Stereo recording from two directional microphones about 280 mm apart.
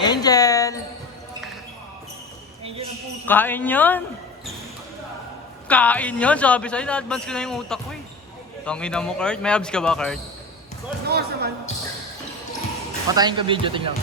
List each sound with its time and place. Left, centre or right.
0.0 s music: centre
3.2 s speech: centre
5.6 s a man's voice: centre
11.1 s speech: right
13.1 s speech: centre